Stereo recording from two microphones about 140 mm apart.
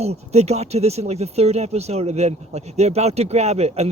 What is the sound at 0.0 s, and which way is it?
Speech, 50° right (ahead or behind).